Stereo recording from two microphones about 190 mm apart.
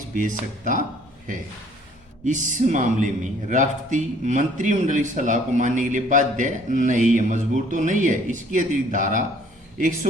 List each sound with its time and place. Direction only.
0.2 s speech: 40° right (ahead or behind)
2.2 s a man's voice: 40° right (ahead or behind)